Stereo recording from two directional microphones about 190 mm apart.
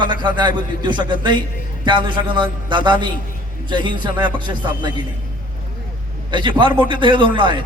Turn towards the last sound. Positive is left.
turn(degrees=-25)  # may be behind; listen again after turning